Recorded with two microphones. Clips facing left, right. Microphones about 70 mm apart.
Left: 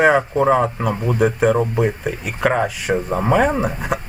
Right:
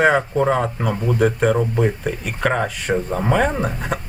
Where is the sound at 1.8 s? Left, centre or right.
Centre.